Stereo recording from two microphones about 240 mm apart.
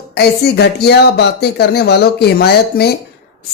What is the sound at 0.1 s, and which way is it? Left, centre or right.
A woman's voice, left.